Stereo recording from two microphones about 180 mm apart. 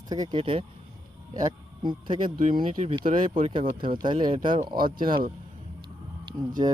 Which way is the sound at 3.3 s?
30° right (ahead or behind).